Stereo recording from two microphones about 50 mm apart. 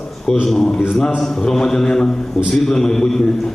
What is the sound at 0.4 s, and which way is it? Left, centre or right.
A man's voice, centre.